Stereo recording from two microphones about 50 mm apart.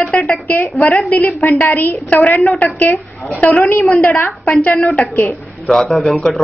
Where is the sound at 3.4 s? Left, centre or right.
Left.